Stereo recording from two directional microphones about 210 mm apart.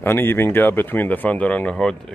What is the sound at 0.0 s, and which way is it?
Speech, 10° left (ahead or behind).